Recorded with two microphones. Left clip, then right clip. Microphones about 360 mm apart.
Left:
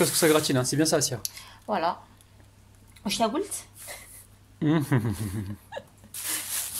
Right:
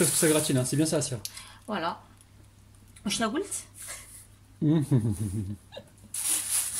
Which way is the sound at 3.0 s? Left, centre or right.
Centre.